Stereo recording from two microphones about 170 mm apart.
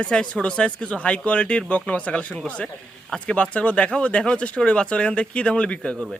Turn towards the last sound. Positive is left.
turn(degrees=5)  # may be behind; listen again after turning